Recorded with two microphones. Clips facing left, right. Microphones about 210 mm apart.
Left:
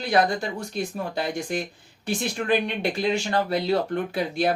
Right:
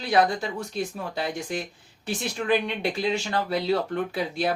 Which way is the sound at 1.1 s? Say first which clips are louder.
Left 3 dB; 50° left (ahead or behind).